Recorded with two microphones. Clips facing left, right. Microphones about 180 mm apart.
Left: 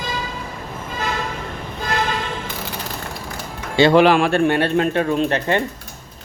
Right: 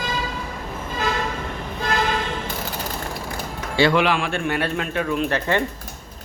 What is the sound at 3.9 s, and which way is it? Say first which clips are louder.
A man's voice: left 7 dB; 40° left (ahead or behind).